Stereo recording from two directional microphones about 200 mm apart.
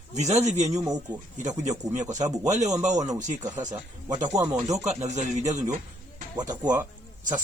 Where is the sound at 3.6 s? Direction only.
40° right (ahead or behind).